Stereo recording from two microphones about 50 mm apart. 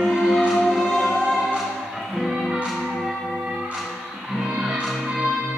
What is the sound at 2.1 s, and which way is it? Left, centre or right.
Music, centre.